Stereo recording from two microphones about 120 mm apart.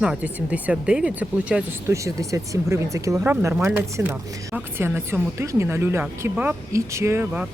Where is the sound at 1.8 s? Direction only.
25° right (ahead or behind).